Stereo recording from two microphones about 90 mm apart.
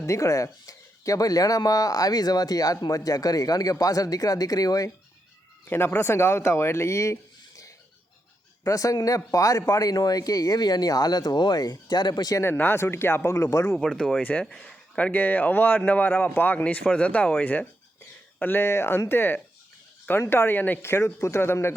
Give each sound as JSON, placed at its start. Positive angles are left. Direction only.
{"t": 0.0, "sound": "speech", "side_deg": 35}
{"t": 5.6, "sound": "speech", "side_deg": 25}
{"t": 8.6, "sound": "speech", "side_deg": 40}
{"t": 12.4, "sound": "speech", "side_deg": 25}
{"t": 13.7, "sound": "speech", "side_deg": 10}
{"t": 14.4, "sound": "speech", "side_deg": 5}